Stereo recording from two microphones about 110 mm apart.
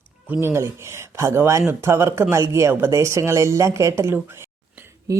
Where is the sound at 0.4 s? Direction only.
25° right (ahead or behind).